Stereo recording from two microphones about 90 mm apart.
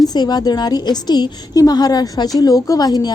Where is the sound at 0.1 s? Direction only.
50° left (ahead or behind).